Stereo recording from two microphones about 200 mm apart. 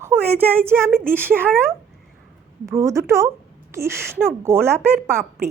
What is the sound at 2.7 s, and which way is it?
Speech, 15° right (ahead or behind).